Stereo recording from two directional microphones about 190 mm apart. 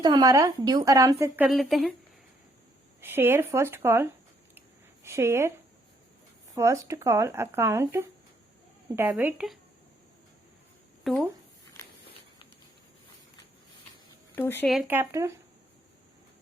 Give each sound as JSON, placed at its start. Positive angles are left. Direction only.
{"t": 0.0, "sound": "a woman's voice", "side_deg": -20}
{"t": 1.5, "sound": "speech", "side_deg": 0}
{"t": 3.0, "sound": "speech", "side_deg": -10}
{"t": 11.1, "sound": "speech", "side_deg": 0}
{"t": 14.3, "sound": "speech", "side_deg": 10}
{"t": 14.7, "sound": "speech", "side_deg": -5}